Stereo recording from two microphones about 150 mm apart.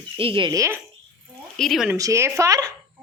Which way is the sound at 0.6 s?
15° right (ahead or behind).